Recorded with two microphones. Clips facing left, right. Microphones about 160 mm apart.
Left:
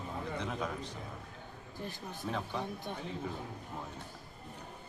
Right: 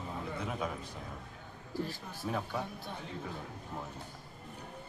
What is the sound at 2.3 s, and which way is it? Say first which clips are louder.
Speech: right 2 dB; 5° right (ahead or behind).